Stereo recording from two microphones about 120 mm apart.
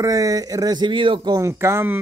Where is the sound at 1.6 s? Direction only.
20° right (ahead or behind).